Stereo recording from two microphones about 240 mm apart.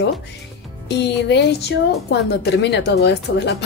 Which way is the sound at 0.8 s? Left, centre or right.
Left.